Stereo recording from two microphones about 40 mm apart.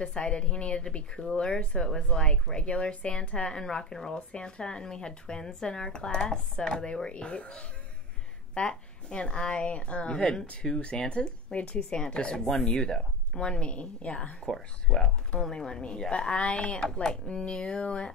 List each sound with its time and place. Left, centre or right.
0.0 s speech: centre
2.9 s speech: left
3.5 s speech: centre